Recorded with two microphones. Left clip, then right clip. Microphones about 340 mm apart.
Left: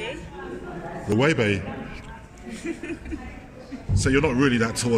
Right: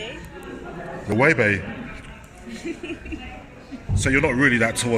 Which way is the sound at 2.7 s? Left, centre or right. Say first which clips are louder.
Even; left.